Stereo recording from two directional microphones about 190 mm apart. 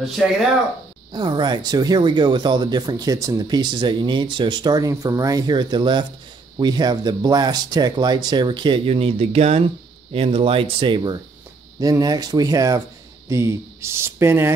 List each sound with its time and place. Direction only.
1.1 s speech: 25° right (ahead or behind)